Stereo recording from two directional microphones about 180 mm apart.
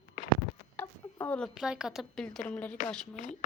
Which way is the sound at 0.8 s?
10° left (ahead or behind).